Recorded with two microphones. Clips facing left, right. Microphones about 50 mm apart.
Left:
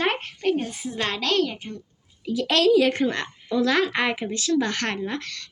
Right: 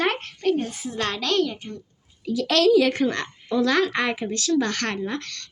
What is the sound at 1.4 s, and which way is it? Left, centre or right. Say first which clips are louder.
A woman's voice: even; centre.